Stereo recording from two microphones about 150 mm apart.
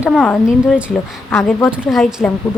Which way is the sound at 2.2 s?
5° left (ahead or behind).